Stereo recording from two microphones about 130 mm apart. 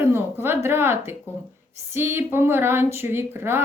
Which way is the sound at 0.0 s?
20° right (ahead or behind).